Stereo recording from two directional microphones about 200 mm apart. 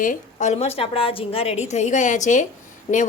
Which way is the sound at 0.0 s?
40° left (ahead or behind).